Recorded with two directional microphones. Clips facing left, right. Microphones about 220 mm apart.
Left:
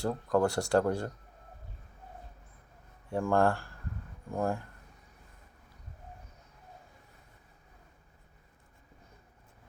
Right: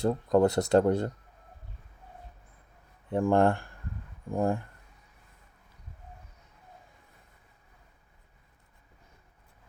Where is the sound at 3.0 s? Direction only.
20° right (ahead or behind).